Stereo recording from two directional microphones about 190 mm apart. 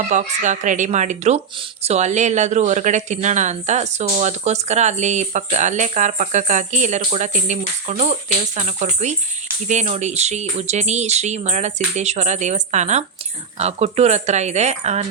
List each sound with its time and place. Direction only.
0.1 s speech: 40° right (ahead or behind)